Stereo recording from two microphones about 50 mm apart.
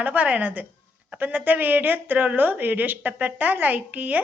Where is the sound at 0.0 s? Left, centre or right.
Right.